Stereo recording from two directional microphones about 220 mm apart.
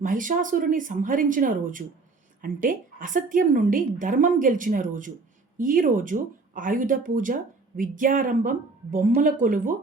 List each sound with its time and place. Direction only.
0.0 s a woman's voice: 35° right (ahead or behind)